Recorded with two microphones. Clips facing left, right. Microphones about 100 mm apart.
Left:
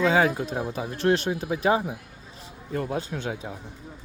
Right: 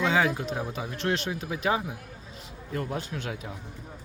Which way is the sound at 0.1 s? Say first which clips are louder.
Left 3 dB; 40° left (ahead or behind).